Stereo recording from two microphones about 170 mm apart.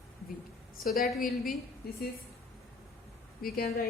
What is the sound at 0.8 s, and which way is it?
Speech, 55° left (ahead or behind).